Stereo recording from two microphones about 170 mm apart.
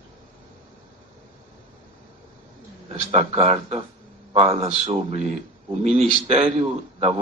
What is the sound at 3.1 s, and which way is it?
A man's voice, 40° right (ahead or behind).